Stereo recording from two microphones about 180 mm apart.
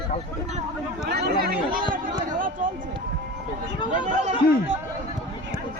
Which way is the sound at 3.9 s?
45° right (ahead or behind).